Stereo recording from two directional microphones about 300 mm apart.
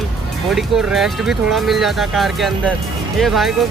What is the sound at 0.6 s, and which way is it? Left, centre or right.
Speech, centre.